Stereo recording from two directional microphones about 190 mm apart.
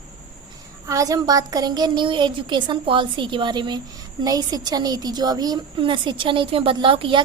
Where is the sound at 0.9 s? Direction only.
20° right (ahead or behind).